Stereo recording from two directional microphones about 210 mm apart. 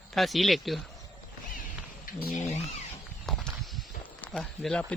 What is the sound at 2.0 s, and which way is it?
Speech, 45° left (ahead or behind).